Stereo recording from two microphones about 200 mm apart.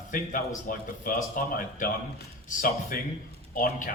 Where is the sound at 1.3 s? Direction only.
45° left (ahead or behind).